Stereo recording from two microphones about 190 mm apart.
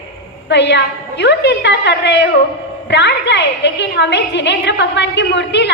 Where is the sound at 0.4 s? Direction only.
65° left (ahead or behind).